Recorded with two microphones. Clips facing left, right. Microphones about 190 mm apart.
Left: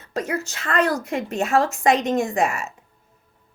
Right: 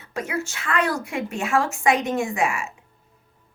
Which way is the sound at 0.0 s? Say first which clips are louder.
Left 2 dB; 40° left (ahead or behind).